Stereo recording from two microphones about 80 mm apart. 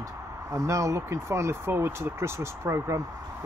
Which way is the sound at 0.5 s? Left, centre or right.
Right.